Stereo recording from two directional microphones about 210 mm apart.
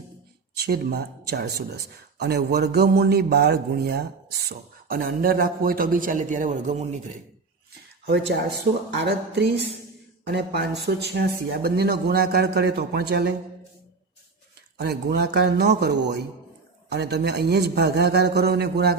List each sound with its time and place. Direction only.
0.6 s speech: 50° right (ahead or behind)
8.0 s speech: 50° right (ahead or behind)
14.8 s speech: 50° right (ahead or behind)